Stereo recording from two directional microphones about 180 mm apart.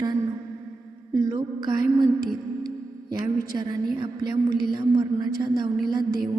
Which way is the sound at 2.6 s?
20° right (ahead or behind).